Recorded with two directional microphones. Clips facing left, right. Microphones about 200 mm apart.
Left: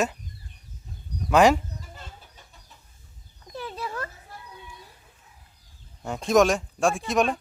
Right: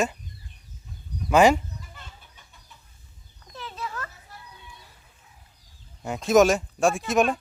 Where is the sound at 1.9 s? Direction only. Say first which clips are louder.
Left 3 dB; 35° left (ahead or behind).